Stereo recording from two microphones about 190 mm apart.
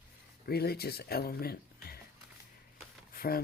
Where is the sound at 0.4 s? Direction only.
55° left (ahead or behind).